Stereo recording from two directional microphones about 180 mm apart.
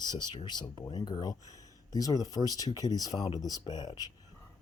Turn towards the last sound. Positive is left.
turn(degrees=20)  # may be behind; listen again after turning